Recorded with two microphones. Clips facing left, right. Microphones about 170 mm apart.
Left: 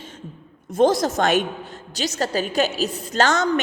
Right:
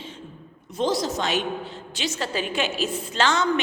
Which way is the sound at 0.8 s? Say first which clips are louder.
Left 7 dB; 50° left (ahead or behind).